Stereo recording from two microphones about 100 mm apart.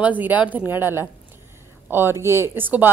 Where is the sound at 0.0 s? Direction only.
15° right (ahead or behind).